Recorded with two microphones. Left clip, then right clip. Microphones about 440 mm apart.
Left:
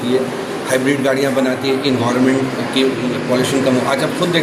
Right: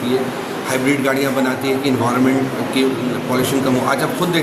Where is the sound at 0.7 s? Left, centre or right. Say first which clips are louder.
Left 2 dB; right.